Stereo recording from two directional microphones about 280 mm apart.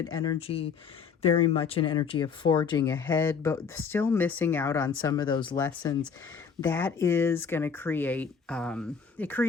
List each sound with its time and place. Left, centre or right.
0.1 s speech: centre